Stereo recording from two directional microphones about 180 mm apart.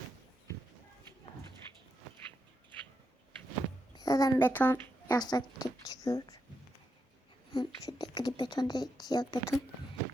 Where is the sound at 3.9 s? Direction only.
20° left (ahead or behind).